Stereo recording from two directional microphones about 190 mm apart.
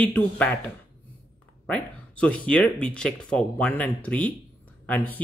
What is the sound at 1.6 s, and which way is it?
Speech, 5° left (ahead or behind).